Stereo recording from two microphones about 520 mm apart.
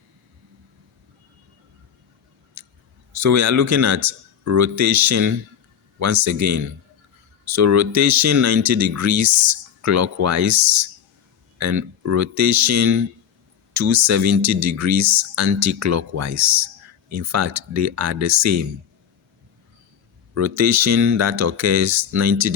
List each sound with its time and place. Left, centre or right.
2.6 s a sound: right
3.2 s speech: right
20.3 s speech: right